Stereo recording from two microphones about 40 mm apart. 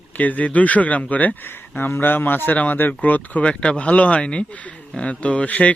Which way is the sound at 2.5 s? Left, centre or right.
Left.